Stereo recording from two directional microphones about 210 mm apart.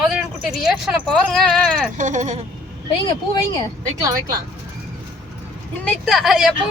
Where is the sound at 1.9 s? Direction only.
35° right (ahead or behind).